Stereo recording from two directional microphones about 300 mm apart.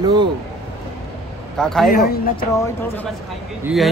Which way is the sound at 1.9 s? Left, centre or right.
Left.